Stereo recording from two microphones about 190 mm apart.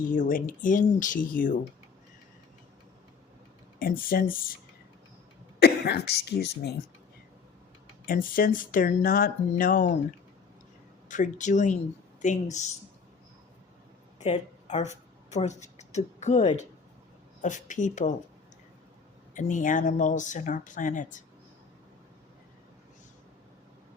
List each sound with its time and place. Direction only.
0.1 s speech: 45° left (ahead or behind)
3.8 s speech: 50° left (ahead or behind)
5.5 s speech: 60° left (ahead or behind)
8.0 s speech: 50° left (ahead or behind)
11.1 s a woman's voice: 40° left (ahead or behind)
14.2 s a woman's voice: 35° left (ahead or behind)
19.3 s speech: 40° left (ahead or behind)